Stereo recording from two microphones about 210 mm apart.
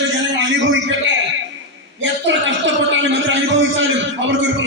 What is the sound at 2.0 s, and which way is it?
A man's voice, 65° right (ahead or behind).